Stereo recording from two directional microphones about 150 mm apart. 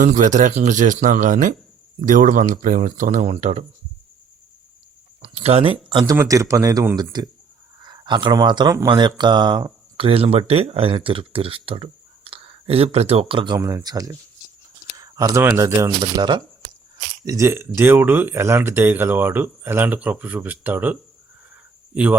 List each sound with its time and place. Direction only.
0.0 s speech: 60° right (ahead or behind)
5.3 s speech: 45° right (ahead or behind)
5.9 s speech: 30° right (ahead or behind)
6.1 s speech: 20° right (ahead or behind)
16.0 s speech: 30° right (ahead or behind)
17.2 s speech: 20° right (ahead or behind)
21.5 s a sound: 10° right (ahead or behind)